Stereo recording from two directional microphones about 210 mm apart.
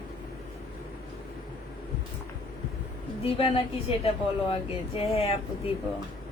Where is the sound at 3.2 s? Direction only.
25° left (ahead or behind).